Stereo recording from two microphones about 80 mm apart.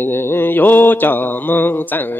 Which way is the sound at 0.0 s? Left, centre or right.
Left.